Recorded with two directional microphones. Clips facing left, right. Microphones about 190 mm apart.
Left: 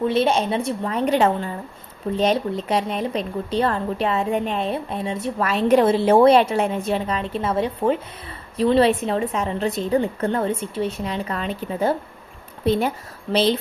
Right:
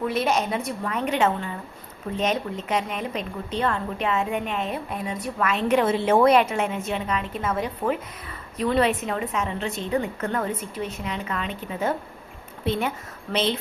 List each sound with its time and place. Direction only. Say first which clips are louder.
0.0 s a woman's voice: left 4 dB; 30° left (ahead or behind)